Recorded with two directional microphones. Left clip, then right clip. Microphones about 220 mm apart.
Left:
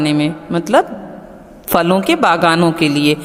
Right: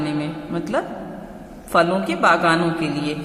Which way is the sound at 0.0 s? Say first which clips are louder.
Left 9 dB; 40° left (ahead or behind).